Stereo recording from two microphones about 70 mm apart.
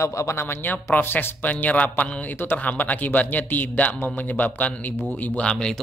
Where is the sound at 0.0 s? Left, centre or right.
Left.